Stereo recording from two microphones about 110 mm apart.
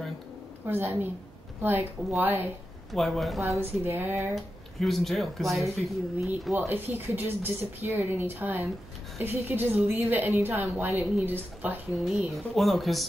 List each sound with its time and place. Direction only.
0.7 s speech: 20° right (ahead or behind)
2.9 s speech: centre (ahead or behind)
3.4 s speech: 25° right (ahead or behind)
4.4 s speech: centre (ahead or behind)
6.5 s a woman's voice: 20° right (ahead or behind)
12.0 s speech: centre (ahead or behind)